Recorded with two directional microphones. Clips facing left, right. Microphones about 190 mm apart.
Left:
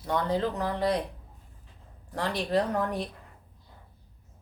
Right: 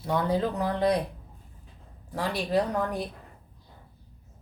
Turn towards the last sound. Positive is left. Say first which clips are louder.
# right 1 dB
turn(degrees=0)  # may be behind; listen again after turning